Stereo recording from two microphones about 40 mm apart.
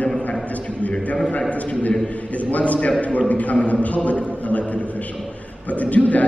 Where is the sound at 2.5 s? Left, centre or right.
Left.